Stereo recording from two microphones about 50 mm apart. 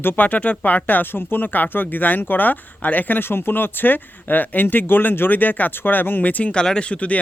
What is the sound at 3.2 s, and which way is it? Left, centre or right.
Speech, left.